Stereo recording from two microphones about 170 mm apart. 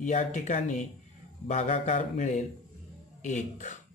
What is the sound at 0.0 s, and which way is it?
Speech, 45° left (ahead or behind).